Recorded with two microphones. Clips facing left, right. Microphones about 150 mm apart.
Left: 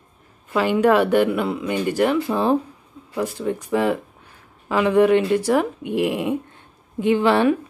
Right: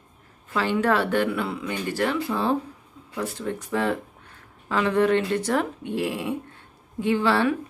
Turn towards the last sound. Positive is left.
turn(degrees=20)  # may be behind; listen again after turning